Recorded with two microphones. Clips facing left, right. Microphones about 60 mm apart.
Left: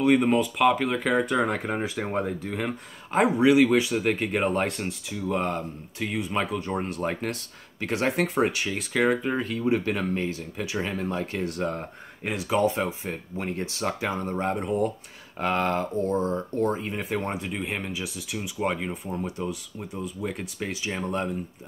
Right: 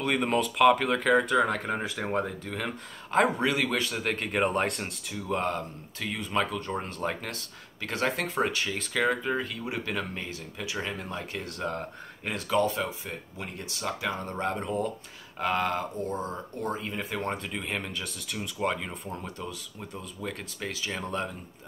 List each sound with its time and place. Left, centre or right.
0.0 s speech: centre
5.5 s speech: left
9.4 s speech: left
11.6 s speech: centre
15.3 s speech: left
17.2 s speech: centre
19.3 s speech: left